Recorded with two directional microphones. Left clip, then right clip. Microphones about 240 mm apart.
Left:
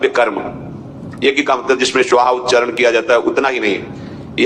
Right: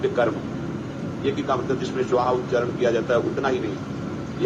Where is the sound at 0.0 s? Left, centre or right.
Left.